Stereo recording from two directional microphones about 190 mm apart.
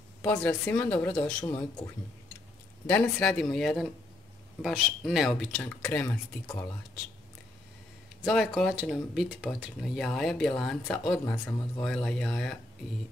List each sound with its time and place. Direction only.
0.2 s speech: 5° left (ahead or behind)
1.4 s speech: 15° left (ahead or behind)
2.9 s speech: 5° left (ahead or behind)
8.2 s speech: centre (ahead or behind)